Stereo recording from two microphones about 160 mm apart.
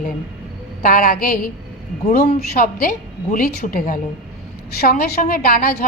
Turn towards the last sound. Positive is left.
turn(degrees=65)  # may be behind; listen again after turning